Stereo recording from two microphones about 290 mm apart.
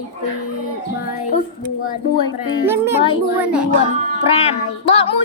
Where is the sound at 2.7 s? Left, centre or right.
Centre.